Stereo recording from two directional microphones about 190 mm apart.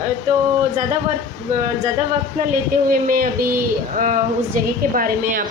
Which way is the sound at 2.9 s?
50° right (ahead or behind).